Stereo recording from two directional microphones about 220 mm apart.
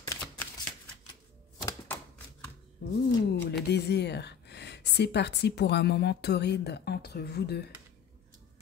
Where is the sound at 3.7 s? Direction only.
50° left (ahead or behind).